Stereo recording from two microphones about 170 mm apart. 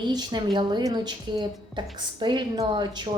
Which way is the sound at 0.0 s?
25° right (ahead or behind).